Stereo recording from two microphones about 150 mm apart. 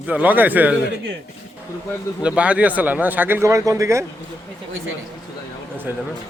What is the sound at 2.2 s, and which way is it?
Speech, 10° right (ahead or behind).